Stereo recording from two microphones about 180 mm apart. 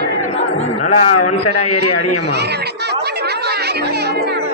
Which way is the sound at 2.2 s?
65° right (ahead or behind).